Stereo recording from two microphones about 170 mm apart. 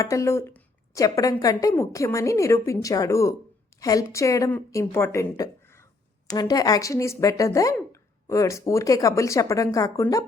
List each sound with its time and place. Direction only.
0.0 s a woman's voice: 20° left (ahead or behind)